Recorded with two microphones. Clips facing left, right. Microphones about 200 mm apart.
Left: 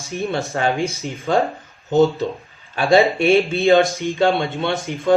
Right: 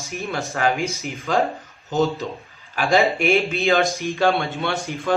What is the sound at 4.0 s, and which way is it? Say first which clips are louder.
A man's voice: left 2 dB; 15° left (ahead or behind).